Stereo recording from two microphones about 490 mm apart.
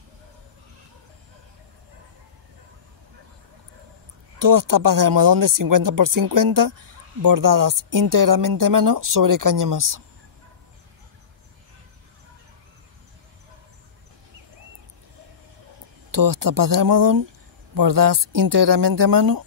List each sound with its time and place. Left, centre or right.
4.4 s speech: right
16.1 s speech: right